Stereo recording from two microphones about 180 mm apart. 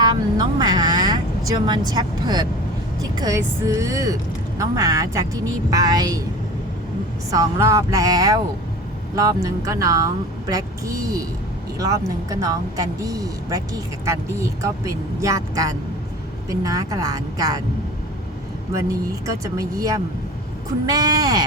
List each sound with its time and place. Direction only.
0.0 s speech: 20° right (ahead or behind)
7.3 s speech: 20° right (ahead or behind)
18.8 s speech: 20° right (ahead or behind)